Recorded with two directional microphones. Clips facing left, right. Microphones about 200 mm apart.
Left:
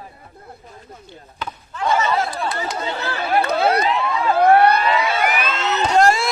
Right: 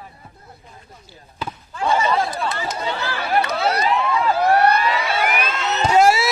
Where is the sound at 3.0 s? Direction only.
55° left (ahead or behind).